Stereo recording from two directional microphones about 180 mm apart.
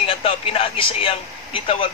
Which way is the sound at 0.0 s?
30° left (ahead or behind).